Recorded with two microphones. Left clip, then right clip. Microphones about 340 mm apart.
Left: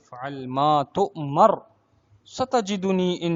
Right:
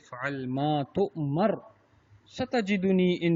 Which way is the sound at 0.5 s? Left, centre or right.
Left.